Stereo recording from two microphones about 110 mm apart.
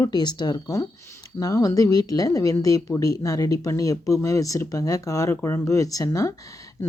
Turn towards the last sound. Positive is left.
turn(degrees=30)  # may be behind; listen again after turning